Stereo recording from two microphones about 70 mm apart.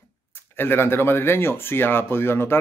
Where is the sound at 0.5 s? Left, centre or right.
Left.